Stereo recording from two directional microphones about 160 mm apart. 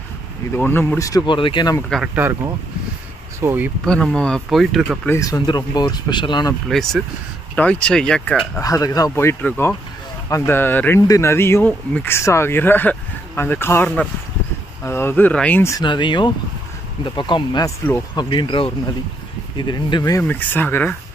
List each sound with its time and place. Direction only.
0.6 s speech: 10° left (ahead or behind); by 1.8 s 30° left (ahead or behind)
2.1 s speech: 15° right (ahead or behind)
3.8 s speech: 5° left (ahead or behind)
5.0 s speech: 20° left (ahead or behind)
6.7 s speech: 5° left (ahead or behind)
8.5 s speech: 20° left (ahead or behind)
15.8 s speech: 30° left (ahead or behind)
20.2 s speech: 10° left (ahead or behind)